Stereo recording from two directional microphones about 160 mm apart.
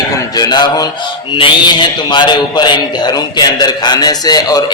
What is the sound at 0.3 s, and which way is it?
A man's voice, 25° left (ahead or behind).